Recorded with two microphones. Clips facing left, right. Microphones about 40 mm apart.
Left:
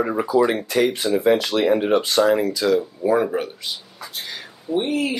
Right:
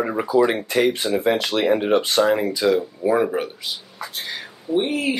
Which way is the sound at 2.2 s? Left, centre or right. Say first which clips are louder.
Left 1 dB; right.